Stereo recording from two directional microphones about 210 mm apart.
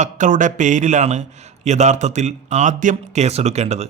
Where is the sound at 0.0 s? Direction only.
35° right (ahead or behind).